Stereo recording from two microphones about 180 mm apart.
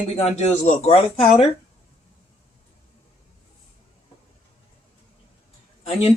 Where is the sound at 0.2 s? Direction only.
35° left (ahead or behind).